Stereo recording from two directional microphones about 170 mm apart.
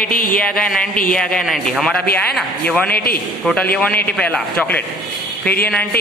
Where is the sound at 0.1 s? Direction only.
55° left (ahead or behind).